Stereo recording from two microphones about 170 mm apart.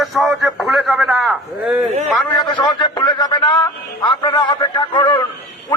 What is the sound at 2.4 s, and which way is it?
A man's voice, 25° left (ahead or behind).